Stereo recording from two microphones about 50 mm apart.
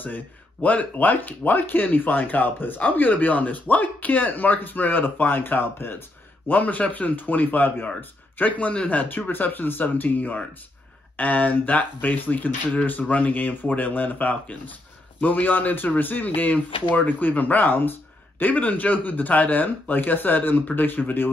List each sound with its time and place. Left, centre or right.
0.0 s speech: left